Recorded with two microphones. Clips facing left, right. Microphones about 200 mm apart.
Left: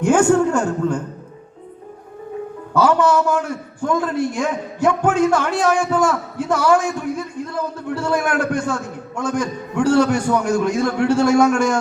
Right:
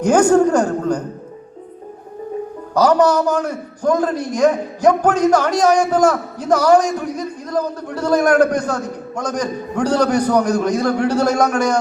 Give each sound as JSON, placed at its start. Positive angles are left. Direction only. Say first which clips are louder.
{"t": 0.0, "sound": "a woman's voice", "louder": "right 2 dB", "side_deg": -40}
{"t": 2.7, "sound": "a man's voice", "louder": "right 2 dB", "side_deg": -40}